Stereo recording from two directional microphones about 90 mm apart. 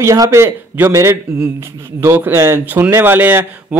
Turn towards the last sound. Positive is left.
turn(degrees=-25)  # may be behind; listen again after turning